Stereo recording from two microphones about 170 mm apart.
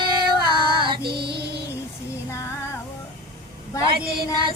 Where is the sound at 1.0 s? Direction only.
70° right (ahead or behind).